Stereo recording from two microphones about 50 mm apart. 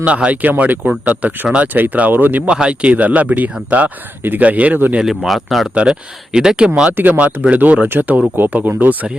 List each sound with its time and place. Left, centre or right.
0.0 s speech: right
0.5 s speech: right
2.5 s speech: right
4.9 s speech: centre
5.7 s speech: centre
6.9 s speech: right